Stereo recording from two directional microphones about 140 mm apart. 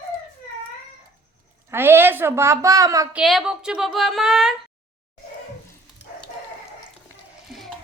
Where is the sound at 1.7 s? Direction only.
15° right (ahead or behind).